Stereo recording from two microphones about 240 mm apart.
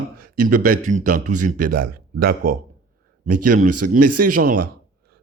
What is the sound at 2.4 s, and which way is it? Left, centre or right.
Speech, right.